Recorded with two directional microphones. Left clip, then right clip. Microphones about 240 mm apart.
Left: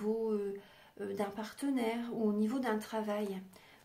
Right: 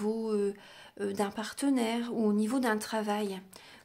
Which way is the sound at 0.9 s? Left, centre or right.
Right.